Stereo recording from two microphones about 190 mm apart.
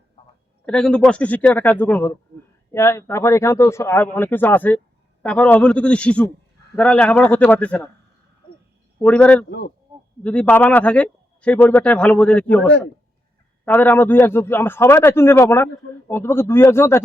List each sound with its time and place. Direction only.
0.6 s a man's voice: 5° left (ahead or behind)
9.0 s a man's voice: 5° left (ahead or behind)
9.5 s speech: 55° left (ahead or behind)
10.2 s a man's voice: 5° left (ahead or behind)